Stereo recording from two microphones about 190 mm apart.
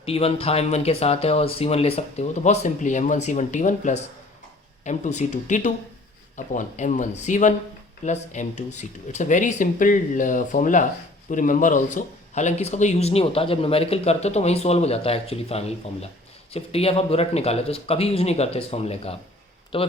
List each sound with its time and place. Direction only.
0.0 s speech: 30° left (ahead or behind)